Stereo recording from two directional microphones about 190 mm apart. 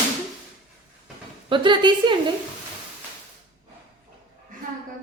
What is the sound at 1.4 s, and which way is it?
Speech, 25° right (ahead or behind).